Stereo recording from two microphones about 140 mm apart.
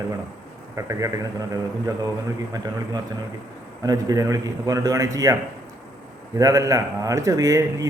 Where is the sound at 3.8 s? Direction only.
25° right (ahead or behind).